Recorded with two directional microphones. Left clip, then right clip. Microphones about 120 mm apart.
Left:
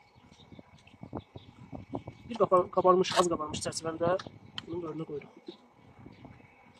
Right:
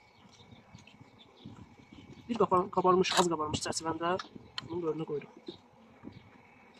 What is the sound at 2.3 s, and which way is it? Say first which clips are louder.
Speech: left 3 dB; 30° left (ahead or behind).